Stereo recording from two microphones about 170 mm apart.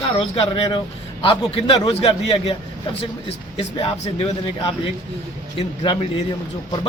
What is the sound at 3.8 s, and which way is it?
A man's voice, 35° left (ahead or behind).